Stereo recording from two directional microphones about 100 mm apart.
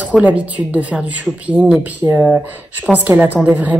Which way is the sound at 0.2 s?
15° right (ahead or behind).